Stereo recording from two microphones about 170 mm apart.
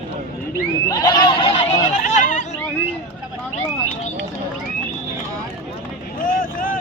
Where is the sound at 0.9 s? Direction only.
25° left (ahead or behind); by 2.6 s 45° left (ahead or behind).